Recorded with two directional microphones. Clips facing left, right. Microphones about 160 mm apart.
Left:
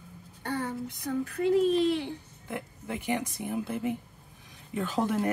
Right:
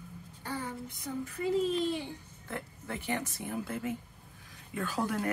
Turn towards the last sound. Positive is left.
turn(degrees=20)  # may be behind; listen again after turning